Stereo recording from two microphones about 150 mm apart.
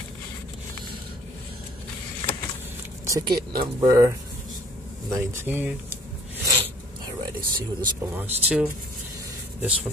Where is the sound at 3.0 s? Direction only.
25° right (ahead or behind).